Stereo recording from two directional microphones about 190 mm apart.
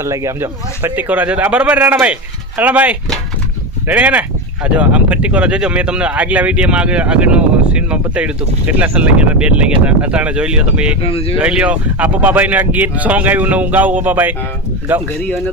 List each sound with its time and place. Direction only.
0.0 s speech: 15° right (ahead or behind)
11.0 s speech: 30° left (ahead or behind)
11.3 s speech: 5° right (ahead or behind)